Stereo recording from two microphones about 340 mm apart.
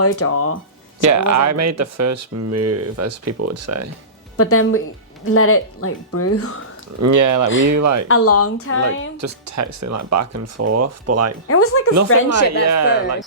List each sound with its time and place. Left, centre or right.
0.0 s a woman's voice: left
1.0 s speech: right
4.4 s a woman's voice: left
7.0 s speech: right
8.0 s a woman's voice: left
9.2 s speech: right
11.4 s a woman's voice: left
12.6 s speech: right